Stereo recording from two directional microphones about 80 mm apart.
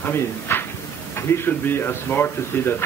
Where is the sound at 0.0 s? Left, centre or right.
Left.